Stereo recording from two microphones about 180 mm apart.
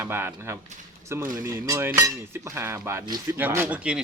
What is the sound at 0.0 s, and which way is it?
Speech, 10° right (ahead or behind).